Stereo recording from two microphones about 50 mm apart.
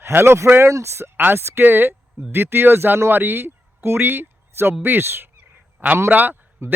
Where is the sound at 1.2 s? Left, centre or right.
Right.